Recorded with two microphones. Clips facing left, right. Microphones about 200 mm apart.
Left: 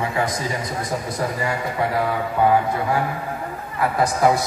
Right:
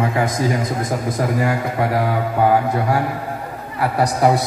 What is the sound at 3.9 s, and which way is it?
Speech, 35° right (ahead or behind).